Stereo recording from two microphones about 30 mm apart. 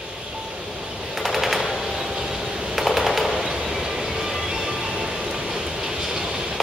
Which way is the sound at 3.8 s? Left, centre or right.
Right.